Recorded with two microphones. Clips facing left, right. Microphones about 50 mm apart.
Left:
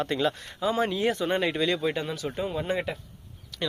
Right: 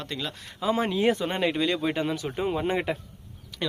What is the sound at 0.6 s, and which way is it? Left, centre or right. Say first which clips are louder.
Speech: right 1 dB; centre.